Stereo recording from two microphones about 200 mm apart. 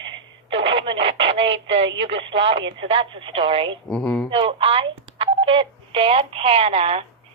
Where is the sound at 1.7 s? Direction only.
70° right (ahead or behind).